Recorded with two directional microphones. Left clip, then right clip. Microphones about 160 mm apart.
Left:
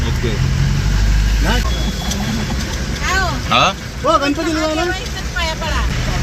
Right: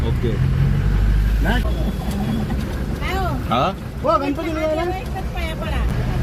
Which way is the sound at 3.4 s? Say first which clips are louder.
Left 6 dB; centre (ahead or behind).